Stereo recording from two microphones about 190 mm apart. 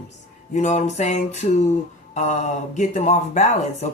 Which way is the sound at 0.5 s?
40° left (ahead or behind).